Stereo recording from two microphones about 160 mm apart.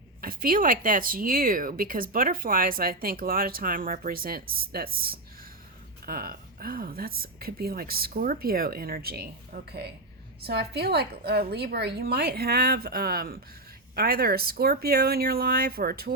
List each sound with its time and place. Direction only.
0.2 s a woman's voice: 65° right (ahead or behind)